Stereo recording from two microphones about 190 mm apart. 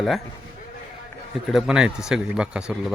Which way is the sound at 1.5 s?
Centre (ahead or behind).